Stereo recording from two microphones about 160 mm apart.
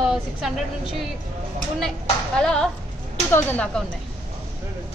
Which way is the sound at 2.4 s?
5° left (ahead or behind).